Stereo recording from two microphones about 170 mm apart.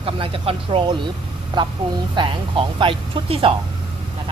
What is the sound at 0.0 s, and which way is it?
Speech, 35° right (ahead or behind).